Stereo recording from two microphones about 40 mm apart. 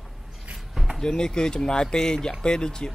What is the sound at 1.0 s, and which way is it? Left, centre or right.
Speech, centre.